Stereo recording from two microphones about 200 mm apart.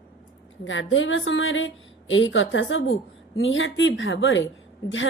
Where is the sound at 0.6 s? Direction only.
70° left (ahead or behind).